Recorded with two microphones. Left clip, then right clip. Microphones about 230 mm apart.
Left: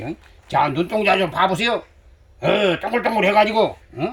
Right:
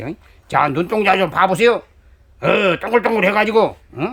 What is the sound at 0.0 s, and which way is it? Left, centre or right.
A man's voice, centre.